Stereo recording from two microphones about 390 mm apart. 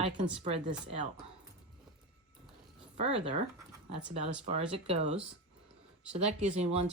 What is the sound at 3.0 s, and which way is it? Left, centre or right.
Speech, centre.